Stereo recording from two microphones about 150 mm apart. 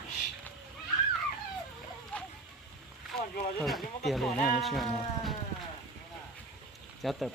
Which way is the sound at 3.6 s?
Centre (ahead or behind).